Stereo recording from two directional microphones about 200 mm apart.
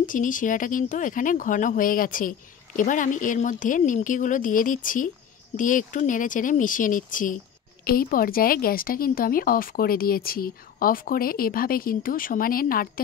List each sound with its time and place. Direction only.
0.0 s a woman's voice: 40° left (ahead or behind)